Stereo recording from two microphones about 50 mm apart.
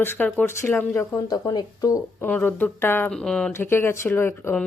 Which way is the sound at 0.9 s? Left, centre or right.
Left.